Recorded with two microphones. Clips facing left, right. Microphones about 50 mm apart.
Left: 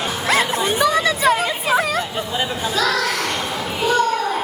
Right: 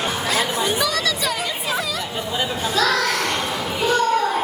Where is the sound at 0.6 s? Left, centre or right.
Left.